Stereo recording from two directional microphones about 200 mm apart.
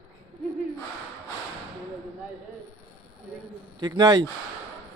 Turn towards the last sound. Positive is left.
turn(degrees=-20)  # may be behind; listen again after turning